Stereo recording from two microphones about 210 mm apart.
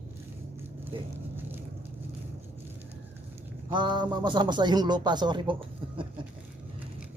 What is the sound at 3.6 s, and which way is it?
Speech, 20° right (ahead or behind).